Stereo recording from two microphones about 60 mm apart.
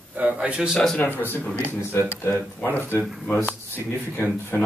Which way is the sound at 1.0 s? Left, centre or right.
Left.